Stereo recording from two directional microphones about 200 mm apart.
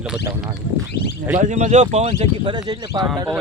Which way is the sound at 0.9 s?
55° left (ahead or behind).